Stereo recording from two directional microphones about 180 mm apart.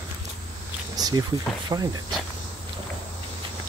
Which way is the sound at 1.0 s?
20° right (ahead or behind).